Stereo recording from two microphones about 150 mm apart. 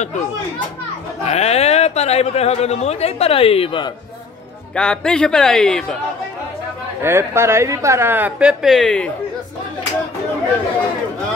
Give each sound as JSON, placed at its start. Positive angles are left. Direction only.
{"t": 1.2, "sound": "speech", "side_deg": 45}
{"t": 4.7, "sound": "speech", "side_deg": 5}
{"t": 7.0, "sound": "a woman's voice", "side_deg": -15}